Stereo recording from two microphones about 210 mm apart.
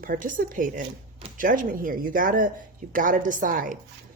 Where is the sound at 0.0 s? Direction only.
40° right (ahead or behind).